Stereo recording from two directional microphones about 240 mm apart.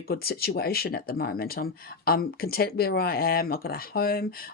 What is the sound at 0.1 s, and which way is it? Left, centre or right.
Speech, left.